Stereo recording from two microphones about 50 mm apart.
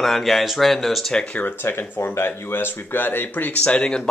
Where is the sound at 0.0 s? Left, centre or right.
Centre.